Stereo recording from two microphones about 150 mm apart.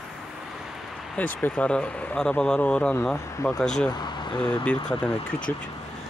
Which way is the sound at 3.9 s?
30° left (ahead or behind).